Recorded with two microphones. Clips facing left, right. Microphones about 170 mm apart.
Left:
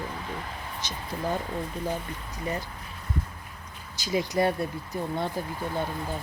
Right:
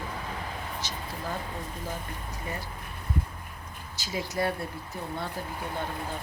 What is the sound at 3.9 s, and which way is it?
Speech, 15° left (ahead or behind).